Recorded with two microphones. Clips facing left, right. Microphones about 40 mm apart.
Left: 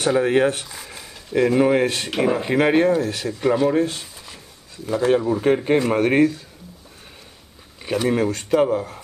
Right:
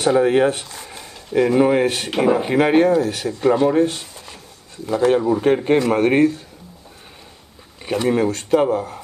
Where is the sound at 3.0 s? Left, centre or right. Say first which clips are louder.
Right 3 dB; right.